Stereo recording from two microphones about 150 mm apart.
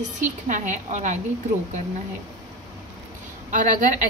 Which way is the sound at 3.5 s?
55° right (ahead or behind).